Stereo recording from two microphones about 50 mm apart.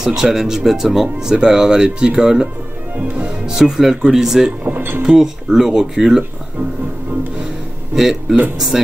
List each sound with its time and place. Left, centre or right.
0.0 s speech: centre
3.0 s speech: right
3.3 s speech: centre
4.6 s speech: right
5.0 s speech: centre
7.9 s speech: centre